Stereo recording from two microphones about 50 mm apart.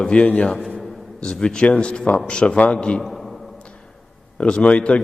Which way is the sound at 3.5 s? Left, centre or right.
Centre.